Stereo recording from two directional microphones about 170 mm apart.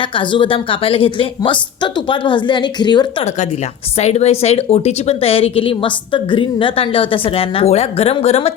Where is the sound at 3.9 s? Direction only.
40° left (ahead or behind).